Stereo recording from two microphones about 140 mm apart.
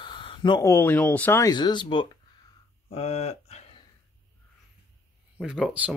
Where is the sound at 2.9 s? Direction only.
45° left (ahead or behind).